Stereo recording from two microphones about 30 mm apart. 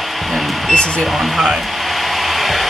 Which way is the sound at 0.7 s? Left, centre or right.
Left.